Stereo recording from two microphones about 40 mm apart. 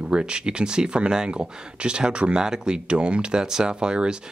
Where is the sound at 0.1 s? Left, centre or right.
Right.